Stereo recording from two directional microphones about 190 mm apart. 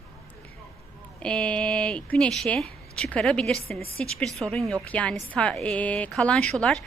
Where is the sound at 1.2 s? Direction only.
5° left (ahead or behind).